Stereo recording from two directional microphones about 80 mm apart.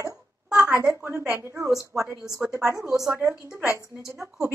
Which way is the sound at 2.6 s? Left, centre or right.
Right.